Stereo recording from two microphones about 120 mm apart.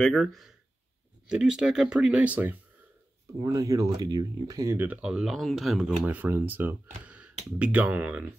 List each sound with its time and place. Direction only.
0.1 s speech: centre (ahead or behind)
3.4 s speech: 30° right (ahead or behind)
4.7 s speech: 10° right (ahead or behind)
6.0 s speech: 15° right (ahead or behind)